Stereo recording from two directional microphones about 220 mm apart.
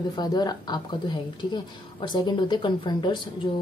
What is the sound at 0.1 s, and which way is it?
Speech, 20° left (ahead or behind).